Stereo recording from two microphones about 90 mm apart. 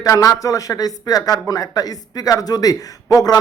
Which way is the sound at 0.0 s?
40° left (ahead or behind).